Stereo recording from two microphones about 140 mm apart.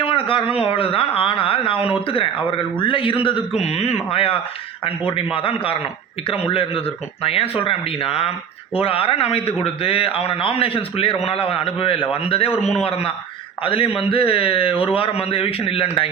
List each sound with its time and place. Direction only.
0.0 s speech: 40° left (ahead or behind)
3.6 s a man's voice: 50° left (ahead or behind)